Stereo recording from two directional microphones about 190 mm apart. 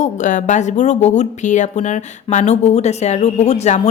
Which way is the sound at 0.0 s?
40° left (ahead or behind).